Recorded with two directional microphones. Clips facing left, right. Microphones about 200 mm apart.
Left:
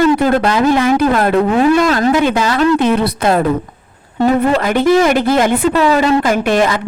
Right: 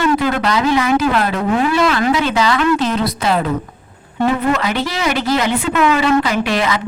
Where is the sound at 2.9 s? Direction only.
55° left (ahead or behind).